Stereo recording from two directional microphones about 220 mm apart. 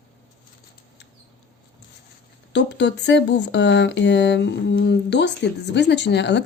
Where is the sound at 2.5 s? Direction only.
50° left (ahead or behind).